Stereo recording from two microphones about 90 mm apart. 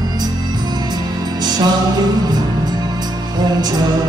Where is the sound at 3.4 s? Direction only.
50° right (ahead or behind).